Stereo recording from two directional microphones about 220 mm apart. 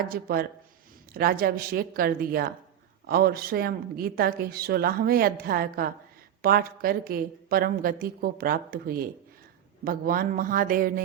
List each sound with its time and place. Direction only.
0.1 s a woman's voice: 40° right (ahead or behind)